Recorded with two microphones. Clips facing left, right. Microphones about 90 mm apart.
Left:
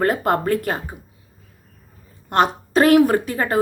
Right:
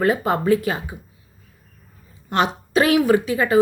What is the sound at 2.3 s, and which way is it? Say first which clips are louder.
A woman's voice: left 2 dB; 45° left (ahead or behind).